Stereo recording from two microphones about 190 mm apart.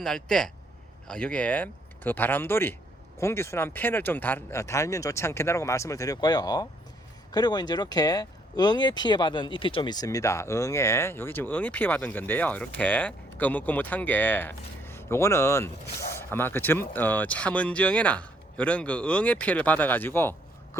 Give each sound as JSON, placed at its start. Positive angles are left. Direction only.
{"t": 0.0, "sound": "speech", "side_deg": 5}